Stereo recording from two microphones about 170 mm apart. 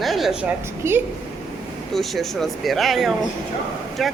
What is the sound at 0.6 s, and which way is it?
Speech, 15° right (ahead or behind).